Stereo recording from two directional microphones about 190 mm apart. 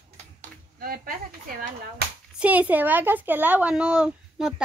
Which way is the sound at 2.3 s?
10° right (ahead or behind).